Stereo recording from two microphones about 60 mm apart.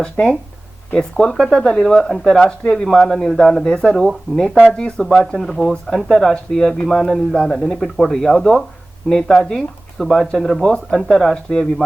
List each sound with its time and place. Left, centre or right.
0.0 s speech: centre